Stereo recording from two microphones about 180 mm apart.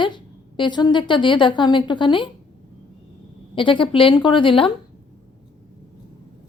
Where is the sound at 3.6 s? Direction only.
30° left (ahead or behind).